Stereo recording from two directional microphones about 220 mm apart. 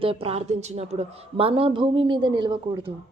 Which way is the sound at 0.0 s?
25° right (ahead or behind).